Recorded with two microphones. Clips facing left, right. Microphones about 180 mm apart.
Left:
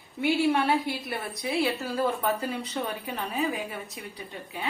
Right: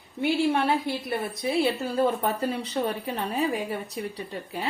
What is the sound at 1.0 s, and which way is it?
Speech, 25° right (ahead or behind).